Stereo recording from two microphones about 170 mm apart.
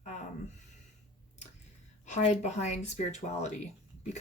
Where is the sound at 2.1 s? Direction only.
40° left (ahead or behind).